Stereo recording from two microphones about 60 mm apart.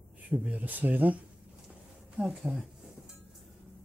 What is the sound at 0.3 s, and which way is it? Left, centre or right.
Speech, right.